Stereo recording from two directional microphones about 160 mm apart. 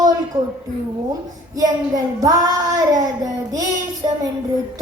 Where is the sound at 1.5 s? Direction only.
25° right (ahead or behind).